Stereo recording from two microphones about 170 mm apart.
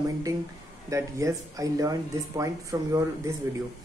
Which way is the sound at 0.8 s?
20° right (ahead or behind).